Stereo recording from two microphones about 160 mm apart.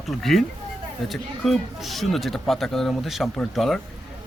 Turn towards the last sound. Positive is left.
turn(degrees=0)  # may be behind; listen again after turning